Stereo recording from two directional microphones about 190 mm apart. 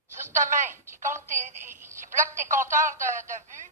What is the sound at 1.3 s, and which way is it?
Telephone, 40° right (ahead or behind).